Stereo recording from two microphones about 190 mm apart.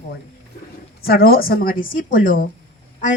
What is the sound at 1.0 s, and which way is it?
A woman's voice, 50° left (ahead or behind).